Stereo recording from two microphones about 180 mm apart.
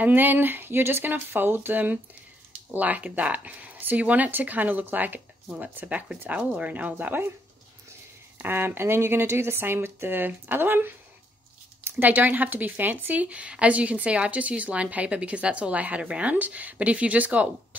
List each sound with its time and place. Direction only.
0.0 s speech: 10° right (ahead or behind)
8.4 s speech: 10° right (ahead or behind)